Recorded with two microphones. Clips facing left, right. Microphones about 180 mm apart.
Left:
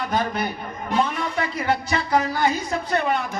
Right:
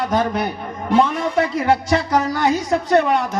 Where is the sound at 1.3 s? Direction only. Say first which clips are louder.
Right 7 dB; 75° right (ahead or behind).